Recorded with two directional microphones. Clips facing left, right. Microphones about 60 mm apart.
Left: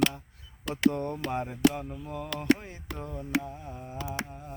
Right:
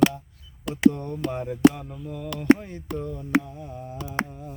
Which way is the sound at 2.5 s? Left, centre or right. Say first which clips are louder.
Right 7 dB; centre.